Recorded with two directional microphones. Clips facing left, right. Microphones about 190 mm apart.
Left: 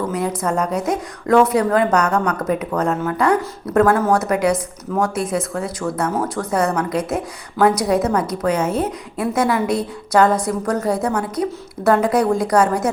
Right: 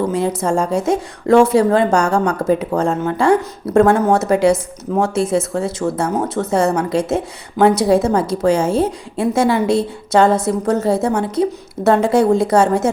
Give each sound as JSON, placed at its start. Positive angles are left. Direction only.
{"t": 0.0, "sound": "a woman's voice", "side_deg": -25}